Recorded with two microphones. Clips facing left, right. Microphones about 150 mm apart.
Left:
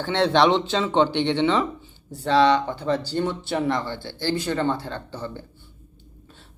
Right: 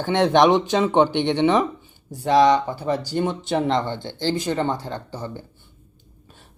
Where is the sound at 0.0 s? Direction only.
15° right (ahead or behind).